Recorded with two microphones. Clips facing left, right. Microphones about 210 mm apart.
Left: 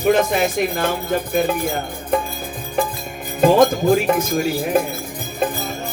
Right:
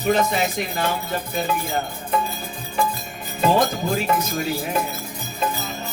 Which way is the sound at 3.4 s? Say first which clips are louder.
Left 6 dB; 50° left (ahead or behind).